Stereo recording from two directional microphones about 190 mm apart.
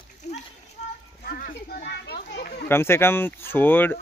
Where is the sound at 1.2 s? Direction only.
50° left (ahead or behind).